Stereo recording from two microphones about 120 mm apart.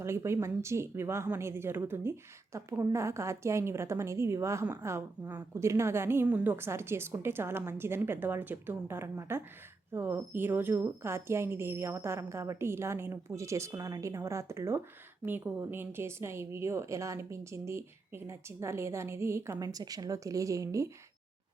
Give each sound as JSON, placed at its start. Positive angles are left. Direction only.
{"t": 0.0, "sound": "a woman's voice", "side_deg": -25}